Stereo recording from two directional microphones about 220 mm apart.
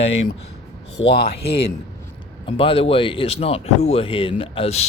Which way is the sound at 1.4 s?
50° left (ahead or behind).